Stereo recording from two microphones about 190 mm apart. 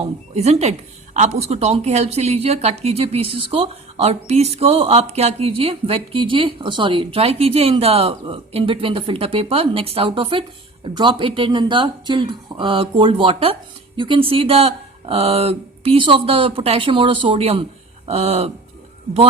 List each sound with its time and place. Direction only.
0.0 s speech: 35° right (ahead or behind)